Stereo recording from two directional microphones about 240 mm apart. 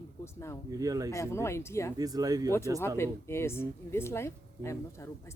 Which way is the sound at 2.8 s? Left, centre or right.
Centre.